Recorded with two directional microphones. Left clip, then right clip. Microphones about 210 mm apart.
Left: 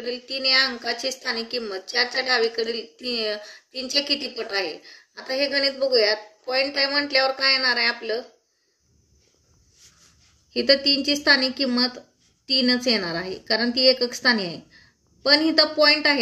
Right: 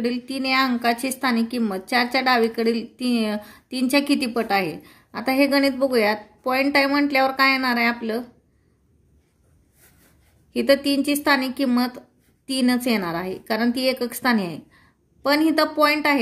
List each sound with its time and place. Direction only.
0.1 s a woman's voice: 50° right (ahead or behind)
10.5 s a woman's voice: 50° right (ahead or behind)